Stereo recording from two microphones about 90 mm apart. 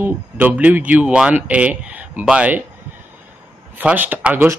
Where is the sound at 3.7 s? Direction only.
20° right (ahead or behind).